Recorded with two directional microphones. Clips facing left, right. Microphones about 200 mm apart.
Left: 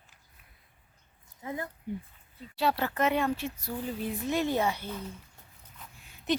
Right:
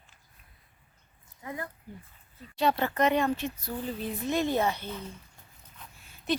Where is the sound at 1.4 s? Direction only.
25° left (ahead or behind).